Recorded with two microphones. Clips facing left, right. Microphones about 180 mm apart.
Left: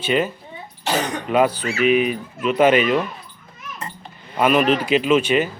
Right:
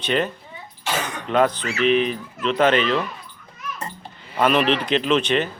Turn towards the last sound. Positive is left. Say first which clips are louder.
# left 3 dB
turn(degrees=5)  # may be behind; listen again after turning